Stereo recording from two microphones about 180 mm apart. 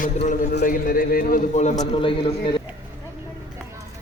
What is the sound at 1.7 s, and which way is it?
Speech, 30° left (ahead or behind).